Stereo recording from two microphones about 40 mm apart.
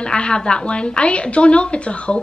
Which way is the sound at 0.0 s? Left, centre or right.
Left.